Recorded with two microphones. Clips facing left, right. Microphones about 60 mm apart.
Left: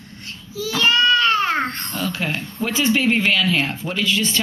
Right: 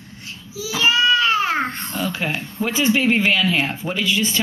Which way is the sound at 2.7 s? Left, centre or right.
Centre.